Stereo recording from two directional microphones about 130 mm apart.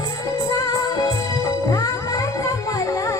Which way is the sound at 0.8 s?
30° left (ahead or behind).